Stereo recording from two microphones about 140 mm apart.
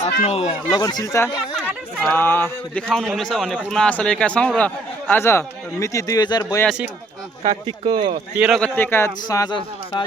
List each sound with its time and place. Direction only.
0.2 s speech: 50° left (ahead or behind)
0.7 s a man's voice: 25° left (ahead or behind)
7.4 s speech: 35° right (ahead or behind)
8.4 s a man's voice: 5° right (ahead or behind)
8.6 s speech: 15° left (ahead or behind)